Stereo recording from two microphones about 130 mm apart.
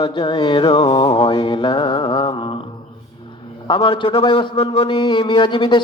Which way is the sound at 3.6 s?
40° left (ahead or behind).